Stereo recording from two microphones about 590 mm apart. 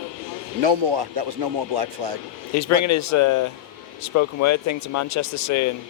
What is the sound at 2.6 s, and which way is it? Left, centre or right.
Speech, left.